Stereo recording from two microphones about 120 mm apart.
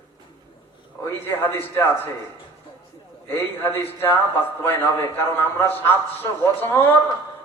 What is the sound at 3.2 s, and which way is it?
A man's voice, 20° left (ahead or behind).